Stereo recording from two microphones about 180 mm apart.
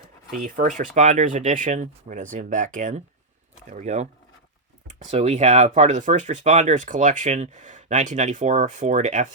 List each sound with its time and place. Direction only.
0.4 s speech: 50° right (ahead or behind)